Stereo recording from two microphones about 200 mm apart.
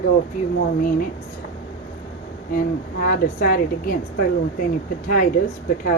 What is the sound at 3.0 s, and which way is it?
Speech, 45° left (ahead or behind).